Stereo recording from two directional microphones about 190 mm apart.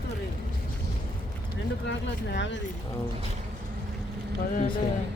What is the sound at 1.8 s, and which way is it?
Speech, 70° left (ahead or behind).